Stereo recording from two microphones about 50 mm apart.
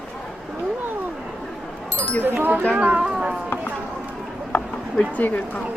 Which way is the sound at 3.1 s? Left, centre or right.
Centre.